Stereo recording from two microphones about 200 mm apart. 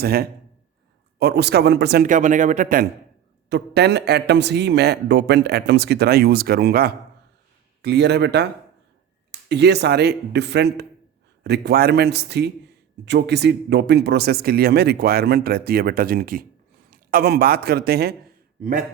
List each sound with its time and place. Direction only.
0.0 s speech: 50° right (ahead or behind)
3.5 s a man's voice: 55° right (ahead or behind)
9.5 s a man's voice: 55° right (ahead or behind)